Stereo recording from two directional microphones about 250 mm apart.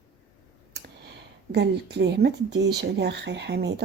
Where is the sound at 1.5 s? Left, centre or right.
Right.